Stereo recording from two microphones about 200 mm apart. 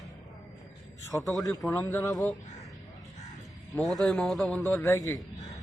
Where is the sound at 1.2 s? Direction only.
Centre (ahead or behind).